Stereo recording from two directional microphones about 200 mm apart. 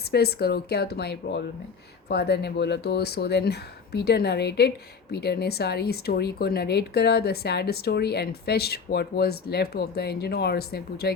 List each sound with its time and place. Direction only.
0.1 s speech: 50° left (ahead or behind)